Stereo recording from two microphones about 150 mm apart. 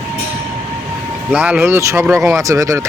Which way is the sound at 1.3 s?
10° right (ahead or behind).